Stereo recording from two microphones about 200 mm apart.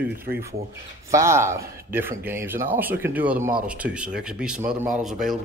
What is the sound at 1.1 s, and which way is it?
Speech, 15° right (ahead or behind).